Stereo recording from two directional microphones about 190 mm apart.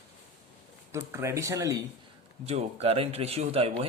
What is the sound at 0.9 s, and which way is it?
Speech, 15° right (ahead or behind).